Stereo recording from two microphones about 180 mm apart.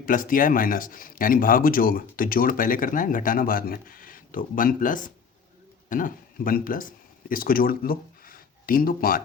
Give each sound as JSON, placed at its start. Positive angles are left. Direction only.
{"t": 0.0, "sound": "speech", "side_deg": 50}